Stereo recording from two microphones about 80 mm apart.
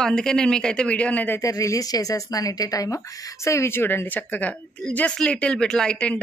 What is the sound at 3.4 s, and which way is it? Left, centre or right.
Speech, left.